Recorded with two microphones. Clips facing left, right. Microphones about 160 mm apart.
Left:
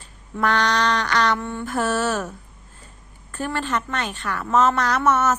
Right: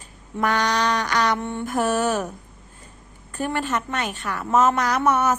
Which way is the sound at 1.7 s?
15° right (ahead or behind).